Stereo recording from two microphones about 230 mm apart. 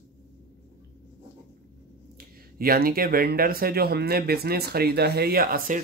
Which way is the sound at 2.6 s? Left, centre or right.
Right.